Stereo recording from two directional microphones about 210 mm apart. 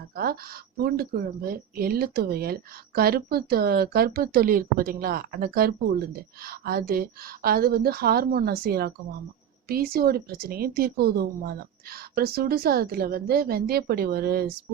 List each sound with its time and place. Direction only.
0.2 s speech: 45° right (ahead or behind)